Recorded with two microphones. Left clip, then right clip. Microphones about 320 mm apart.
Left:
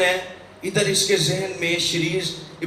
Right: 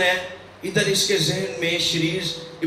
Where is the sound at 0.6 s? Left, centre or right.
Left.